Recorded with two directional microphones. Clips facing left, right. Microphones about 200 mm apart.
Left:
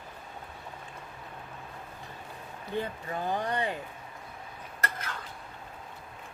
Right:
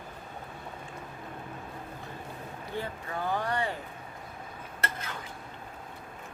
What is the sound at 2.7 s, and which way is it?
Speech, 20° left (ahead or behind).